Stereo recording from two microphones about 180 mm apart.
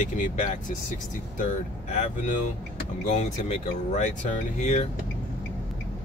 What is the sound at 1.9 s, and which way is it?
Speech, 45° left (ahead or behind).